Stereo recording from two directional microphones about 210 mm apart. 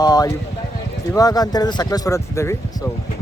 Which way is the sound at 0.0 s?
20° left (ahead or behind).